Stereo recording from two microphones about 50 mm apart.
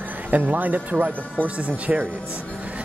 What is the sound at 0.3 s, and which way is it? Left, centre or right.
Speech, right.